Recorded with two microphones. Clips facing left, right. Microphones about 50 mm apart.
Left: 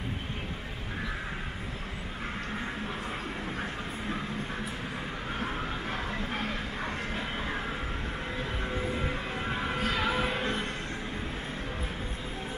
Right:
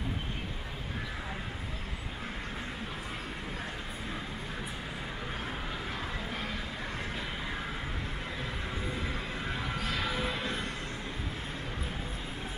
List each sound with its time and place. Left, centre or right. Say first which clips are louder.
5.4 s a sound: left 4 dB; left
8.9 s music: left 3 dB; left
9.8 s music: left 5 dB; left